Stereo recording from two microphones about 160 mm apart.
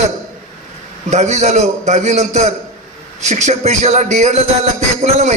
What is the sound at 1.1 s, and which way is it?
Speech, 45° right (ahead or behind).